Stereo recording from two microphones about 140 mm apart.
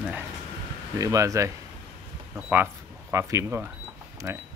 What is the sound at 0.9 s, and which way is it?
Speech, 25° right (ahead or behind).